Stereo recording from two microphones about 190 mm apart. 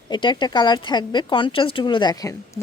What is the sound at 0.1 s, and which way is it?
Speech, 25° left (ahead or behind).